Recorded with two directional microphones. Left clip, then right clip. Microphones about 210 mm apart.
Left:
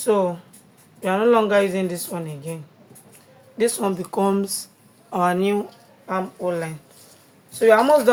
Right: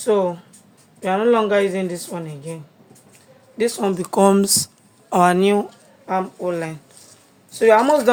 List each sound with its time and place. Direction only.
0.0 s a woman's voice: 15° right (ahead or behind)
3.6 s speech: 25° right (ahead or behind); by 5.6 s 45° right (ahead or behind)
6.1 s a woman's voice: 30° right (ahead or behind)